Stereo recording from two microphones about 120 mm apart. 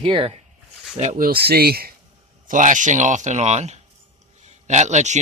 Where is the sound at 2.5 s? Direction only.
90° right.